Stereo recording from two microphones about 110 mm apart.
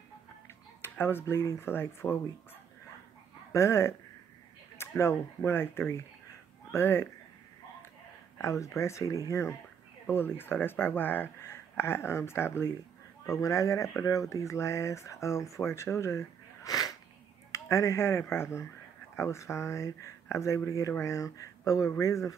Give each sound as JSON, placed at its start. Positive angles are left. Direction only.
{"t": 0.9, "sound": "speech", "side_deg": 20}
{"t": 3.5, "sound": "speech", "side_deg": 25}
{"t": 8.4, "sound": "speech", "side_deg": 30}